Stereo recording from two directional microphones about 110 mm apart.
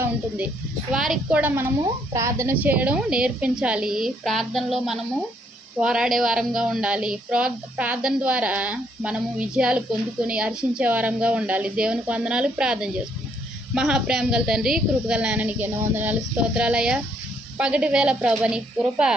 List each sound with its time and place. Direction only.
0.0 s speech: 15° right (ahead or behind)
0.9 s a woman's voice: 5° right (ahead or behind)
1.4 s a woman's voice: 20° right (ahead or behind)
2.6 s speech: 15° right (ahead or behind)